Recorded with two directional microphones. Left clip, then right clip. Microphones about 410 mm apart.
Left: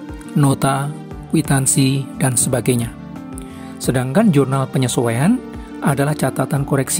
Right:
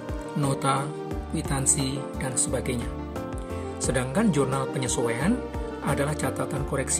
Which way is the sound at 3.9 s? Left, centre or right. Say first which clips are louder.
Left 9 dB; centre.